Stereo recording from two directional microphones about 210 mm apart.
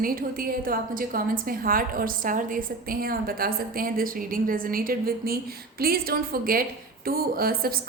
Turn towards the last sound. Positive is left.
turn(degrees=-45)  # may be behind; listen again after turning